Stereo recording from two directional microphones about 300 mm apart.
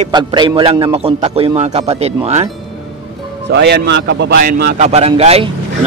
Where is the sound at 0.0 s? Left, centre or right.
Centre.